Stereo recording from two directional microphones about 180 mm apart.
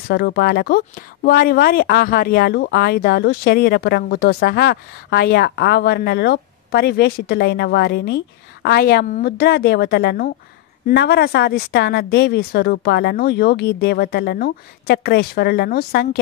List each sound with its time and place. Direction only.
0.1 s speech: 65° left (ahead or behind); by 9.2 s 50° left (ahead or behind)
9.2 s speech: 60° left (ahead or behind)